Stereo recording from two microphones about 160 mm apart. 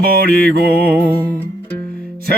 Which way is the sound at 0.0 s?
70° right (ahead or behind).